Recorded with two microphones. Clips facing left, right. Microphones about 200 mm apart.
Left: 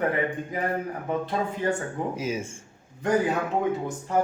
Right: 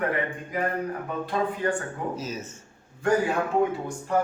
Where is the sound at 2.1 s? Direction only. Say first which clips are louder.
Left 4 dB; 10° left (ahead or behind).